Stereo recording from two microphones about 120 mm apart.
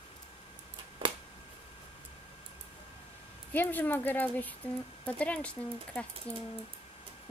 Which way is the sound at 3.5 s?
15° left (ahead or behind).